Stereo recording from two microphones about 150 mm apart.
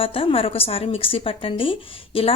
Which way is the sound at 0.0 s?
40° left (ahead or behind).